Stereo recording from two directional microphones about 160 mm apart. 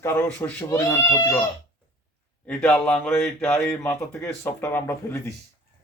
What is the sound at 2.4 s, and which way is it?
A man's voice, 5° left (ahead or behind).